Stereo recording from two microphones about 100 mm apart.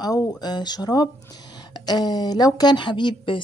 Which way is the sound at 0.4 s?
45° left (ahead or behind).